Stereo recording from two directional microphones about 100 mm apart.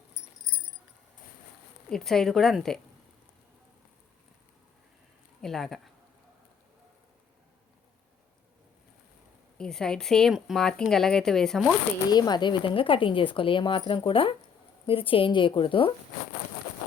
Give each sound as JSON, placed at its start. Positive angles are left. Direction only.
{"t": 1.9, "sound": "a woman's voice", "side_deg": 5}
{"t": 5.4, "sound": "speech", "side_deg": 5}
{"t": 9.6, "sound": "a woman's voice", "side_deg": 5}
{"t": 12.1, "sound": "a woman's voice", "side_deg": 45}